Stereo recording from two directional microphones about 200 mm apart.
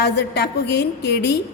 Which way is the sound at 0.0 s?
55° left (ahead or behind).